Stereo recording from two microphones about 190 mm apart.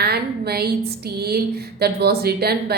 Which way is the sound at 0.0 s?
55° right (ahead or behind).